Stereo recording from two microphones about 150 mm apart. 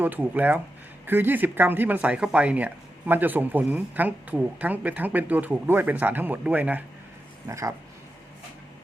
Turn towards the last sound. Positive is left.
turn(degrees=-20)  # may be behind; listen again after turning